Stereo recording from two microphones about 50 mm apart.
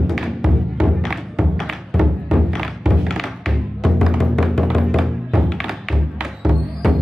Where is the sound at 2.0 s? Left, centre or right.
Centre.